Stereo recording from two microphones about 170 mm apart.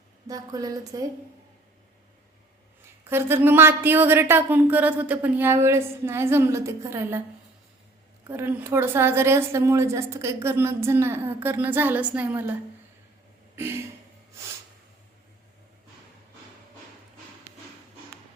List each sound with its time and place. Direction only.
0.3 s a woman's voice: 20° right (ahead or behind)
3.1 s a woman's voice: 15° right (ahead or behind)
8.3 s a woman's voice: 15° right (ahead or behind)